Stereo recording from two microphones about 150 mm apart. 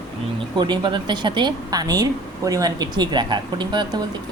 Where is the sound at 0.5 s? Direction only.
30° right (ahead or behind).